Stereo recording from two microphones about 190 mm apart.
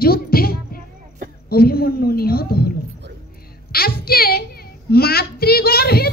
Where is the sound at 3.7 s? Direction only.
55° left (ahead or behind).